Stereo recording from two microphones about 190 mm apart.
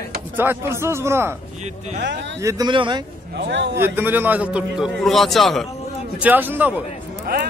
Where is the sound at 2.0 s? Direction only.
65° right (ahead or behind).